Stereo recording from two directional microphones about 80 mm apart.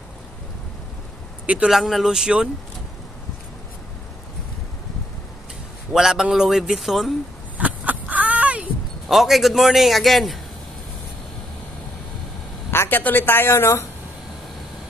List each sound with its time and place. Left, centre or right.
1.4 s speech: centre
1.7 s a man's voice: centre
5.9 s a man's voice: centre
7.5 s a sound: centre
9.1 s a man's voice: centre
12.7 s a woman's voice: left